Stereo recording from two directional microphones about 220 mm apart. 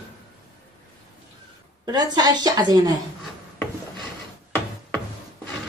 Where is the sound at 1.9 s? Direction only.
20° right (ahead or behind).